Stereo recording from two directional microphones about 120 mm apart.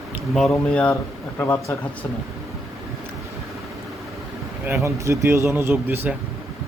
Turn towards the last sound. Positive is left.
turn(degrees=-15)  # may be behind; listen again after turning